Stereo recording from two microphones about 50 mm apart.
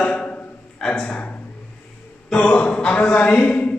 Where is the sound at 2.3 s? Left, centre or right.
Left.